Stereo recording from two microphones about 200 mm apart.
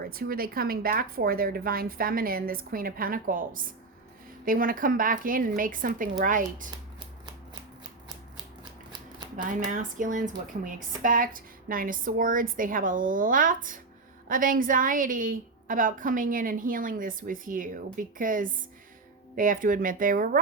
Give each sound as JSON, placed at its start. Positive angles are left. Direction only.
{"t": 0.0, "sound": "a woman's voice", "side_deg": -45}
{"t": 9.2, "sound": "a sound", "side_deg": -20}
{"t": 9.6, "sound": "a woman's voice", "side_deg": -40}